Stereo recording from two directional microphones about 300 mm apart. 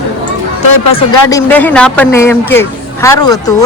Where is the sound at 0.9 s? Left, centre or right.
Centre.